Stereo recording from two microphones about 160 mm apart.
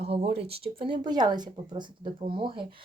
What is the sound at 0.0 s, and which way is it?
Speech, 40° right (ahead or behind).